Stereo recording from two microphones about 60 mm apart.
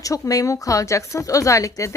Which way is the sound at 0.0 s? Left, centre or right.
Left.